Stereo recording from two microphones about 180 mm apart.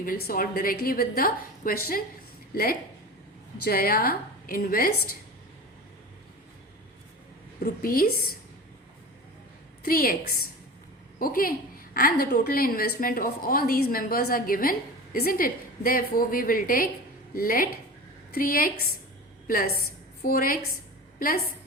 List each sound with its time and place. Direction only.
0.0 s a woman's voice: 55° left (ahead or behind)
7.6 s a woman's voice: 55° left (ahead or behind)
9.8 s a woman's voice: 55° left (ahead or behind)